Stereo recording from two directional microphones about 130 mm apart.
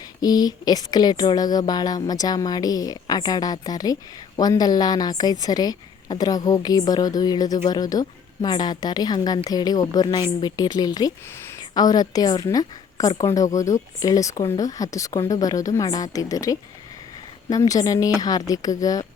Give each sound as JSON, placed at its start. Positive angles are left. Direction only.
{"t": 0.2, "sound": "a woman's voice", "side_deg": 30}